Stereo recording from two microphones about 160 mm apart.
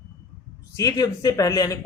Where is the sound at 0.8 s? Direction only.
25° left (ahead or behind).